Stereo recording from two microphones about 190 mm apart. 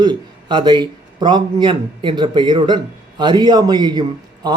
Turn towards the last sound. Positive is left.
turn(degrees=-20)  # may be behind; listen again after turning